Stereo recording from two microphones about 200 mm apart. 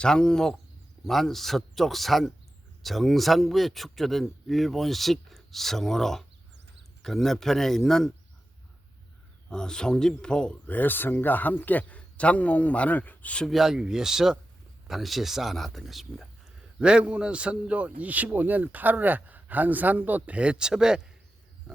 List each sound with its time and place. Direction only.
0.0 s speech: 5° left (ahead or behind)
9.5 s speech: 5° left (ahead or behind)